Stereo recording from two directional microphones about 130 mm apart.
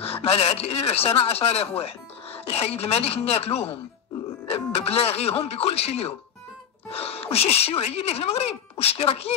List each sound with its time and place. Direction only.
0.0 s speech: 50° left (ahead or behind)